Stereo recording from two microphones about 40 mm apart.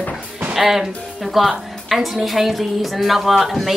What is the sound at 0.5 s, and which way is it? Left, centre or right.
A woman's voice, centre.